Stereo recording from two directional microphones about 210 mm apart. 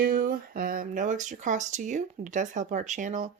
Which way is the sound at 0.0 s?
45° right (ahead or behind).